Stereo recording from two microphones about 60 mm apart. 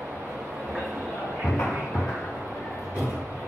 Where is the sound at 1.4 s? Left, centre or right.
Centre.